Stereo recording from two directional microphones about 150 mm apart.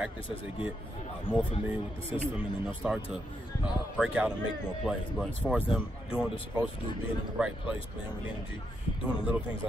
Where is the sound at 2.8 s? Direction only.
5° right (ahead or behind).